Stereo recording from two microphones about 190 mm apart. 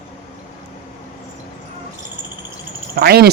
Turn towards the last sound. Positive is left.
turn(degrees=-55)  # may be behind; listen again after turning